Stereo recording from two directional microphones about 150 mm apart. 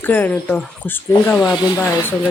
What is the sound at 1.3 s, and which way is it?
Speech, 5° right (ahead or behind).